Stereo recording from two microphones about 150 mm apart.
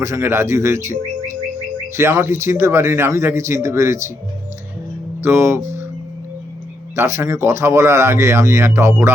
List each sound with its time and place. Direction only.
0.0 s speech: 20° right (ahead or behind)
5.2 s speech: 15° right (ahead or behind)
6.9 s speech: 15° right (ahead or behind)